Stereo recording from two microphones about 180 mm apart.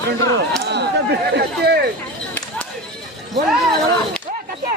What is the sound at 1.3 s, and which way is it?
Speech, 65° right (ahead or behind).